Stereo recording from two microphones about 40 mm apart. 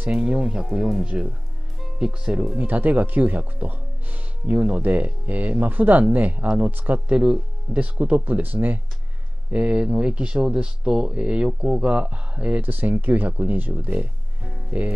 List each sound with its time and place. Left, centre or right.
0.1 s speech: right
2.6 s speech: right
6.7 s speech: right
7.2 s speech: right
7.8 s speech: right
9.5 s speech: right
12.6 s speech: right
13.3 s speech: right
13.6 s speech: right